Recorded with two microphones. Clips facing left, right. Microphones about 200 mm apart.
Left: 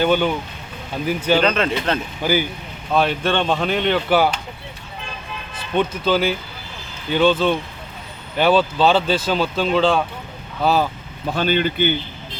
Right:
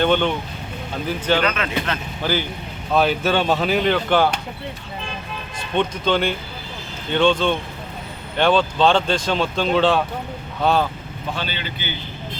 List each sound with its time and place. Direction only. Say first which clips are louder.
0.0 s speech: left 1 dB; 5° left (ahead or behind)
1.4 s speech: left 3 dB; 35° left (ahead or behind)
2.2 s speech: left 3 dB; 15° left (ahead or behind)
2.9 s speech: right 1 dB; centre (ahead or behind)
5.7 s speech: left 1 dB; 5° left (ahead or behind)
11.3 s speech: left 10 dB; 50° left (ahead or behind)